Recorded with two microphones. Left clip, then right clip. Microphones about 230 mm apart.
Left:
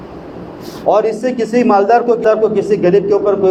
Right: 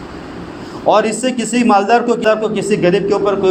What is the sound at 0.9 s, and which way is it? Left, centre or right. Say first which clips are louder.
A man's voice: even; right.